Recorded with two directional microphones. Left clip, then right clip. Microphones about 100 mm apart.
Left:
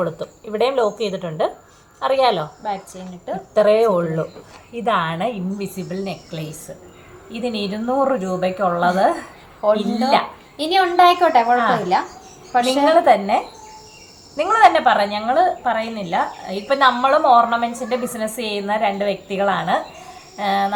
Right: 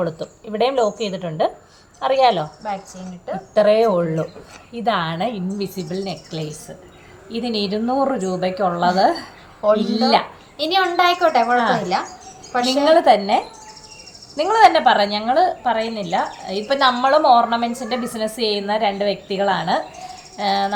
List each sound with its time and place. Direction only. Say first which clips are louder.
0.0 s a woman's voice: left 1 dB; 15° right (ahead or behind)
3.5 s a woman's voice: even; 15° right (ahead or behind)
10.6 s a child's voice: left 3 dB; 40° left (ahead or behind)
13.0 s a woman's voice: even; 20° right (ahead or behind)